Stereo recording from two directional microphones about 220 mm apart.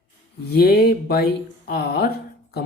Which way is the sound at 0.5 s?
45° left (ahead or behind).